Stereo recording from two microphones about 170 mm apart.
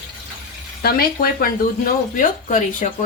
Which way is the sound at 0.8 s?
65° left (ahead or behind).